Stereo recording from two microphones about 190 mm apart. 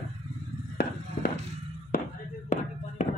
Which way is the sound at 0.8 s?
55° left (ahead or behind).